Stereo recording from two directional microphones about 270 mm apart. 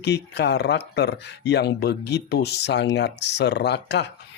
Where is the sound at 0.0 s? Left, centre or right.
Left.